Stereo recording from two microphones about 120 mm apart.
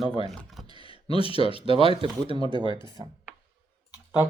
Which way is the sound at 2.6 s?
40° left (ahead or behind).